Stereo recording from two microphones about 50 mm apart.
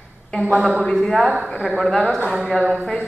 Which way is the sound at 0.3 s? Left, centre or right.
Centre.